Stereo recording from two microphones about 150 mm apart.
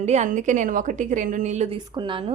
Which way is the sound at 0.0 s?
50° right (ahead or behind).